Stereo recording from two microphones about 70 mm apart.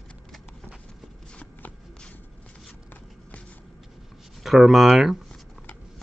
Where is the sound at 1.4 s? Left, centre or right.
Left.